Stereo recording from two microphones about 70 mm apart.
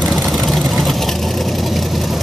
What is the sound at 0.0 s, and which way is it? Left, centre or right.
Vehicle, right.